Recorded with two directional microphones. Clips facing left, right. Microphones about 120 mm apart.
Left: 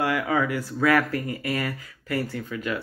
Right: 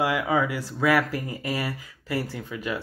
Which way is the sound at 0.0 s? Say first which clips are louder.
Even; 15° right (ahead or behind).